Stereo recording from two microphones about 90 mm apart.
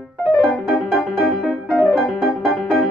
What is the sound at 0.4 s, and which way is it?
Music, 15° left (ahead or behind).